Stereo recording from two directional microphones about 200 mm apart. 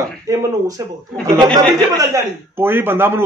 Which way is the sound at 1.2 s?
20° right (ahead or behind).